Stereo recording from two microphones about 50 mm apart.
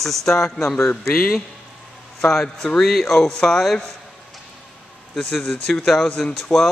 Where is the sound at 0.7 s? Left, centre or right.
Left.